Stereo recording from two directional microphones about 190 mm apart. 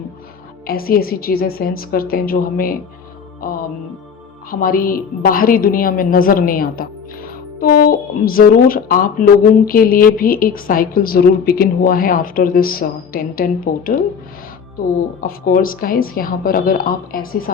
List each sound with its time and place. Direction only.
0.7 s a woman's voice: 50° left (ahead or behind)
4.6 s a woman's voice: 50° left (ahead or behind)
15.2 s a woman's voice: 50° left (ahead or behind)